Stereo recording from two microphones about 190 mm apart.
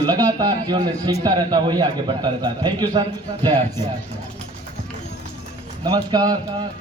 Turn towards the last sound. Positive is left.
turn(degrees=-20)  # may be behind; listen again after turning